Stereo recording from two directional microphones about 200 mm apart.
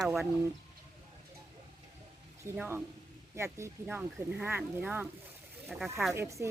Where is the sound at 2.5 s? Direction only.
10° right (ahead or behind).